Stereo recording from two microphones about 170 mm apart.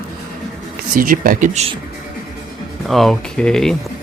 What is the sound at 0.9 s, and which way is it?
Speech, 55° right (ahead or behind).